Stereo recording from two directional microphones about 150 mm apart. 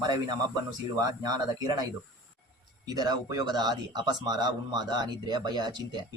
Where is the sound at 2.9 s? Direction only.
25° right (ahead or behind).